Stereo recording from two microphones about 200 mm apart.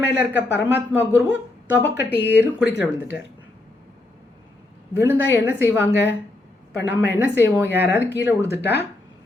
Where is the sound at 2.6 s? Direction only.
55° left (ahead or behind).